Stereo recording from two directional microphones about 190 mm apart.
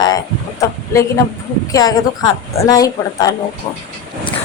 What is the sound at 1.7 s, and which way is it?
A woman's voice, 20° left (ahead or behind).